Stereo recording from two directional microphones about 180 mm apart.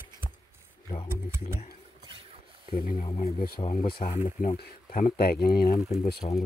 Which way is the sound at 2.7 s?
55° left (ahead or behind).